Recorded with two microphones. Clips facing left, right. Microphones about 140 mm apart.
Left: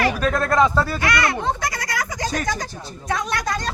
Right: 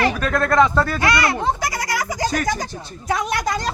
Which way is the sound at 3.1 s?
25° right (ahead or behind).